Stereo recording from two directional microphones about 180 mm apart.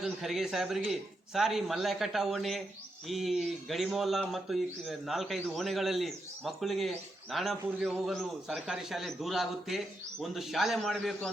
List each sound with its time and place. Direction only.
0.0 s speech: centre (ahead or behind)